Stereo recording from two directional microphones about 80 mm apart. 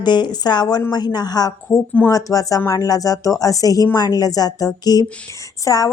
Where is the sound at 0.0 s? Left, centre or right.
Left.